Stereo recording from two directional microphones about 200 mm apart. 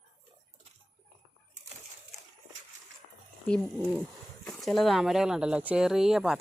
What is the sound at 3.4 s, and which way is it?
Speech, 5° left (ahead or behind).